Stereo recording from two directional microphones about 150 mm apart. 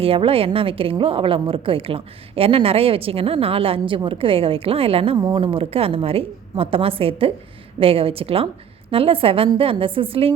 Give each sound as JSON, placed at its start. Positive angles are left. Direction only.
{"t": 0.0, "sound": "a woman's voice", "side_deg": -40}
{"t": 5.1, "sound": "a woman's voice", "side_deg": -30}